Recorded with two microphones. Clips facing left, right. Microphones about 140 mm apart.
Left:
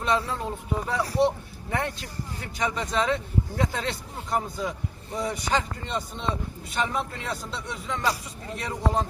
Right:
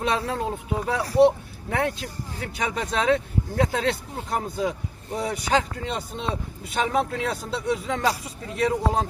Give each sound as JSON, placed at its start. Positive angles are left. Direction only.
{"t": 0.0, "sound": "speech", "side_deg": -60}